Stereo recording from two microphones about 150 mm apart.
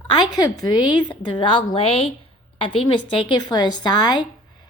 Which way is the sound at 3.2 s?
30° left (ahead or behind).